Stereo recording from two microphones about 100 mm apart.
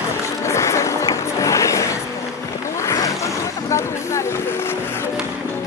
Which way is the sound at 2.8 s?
35° left (ahead or behind).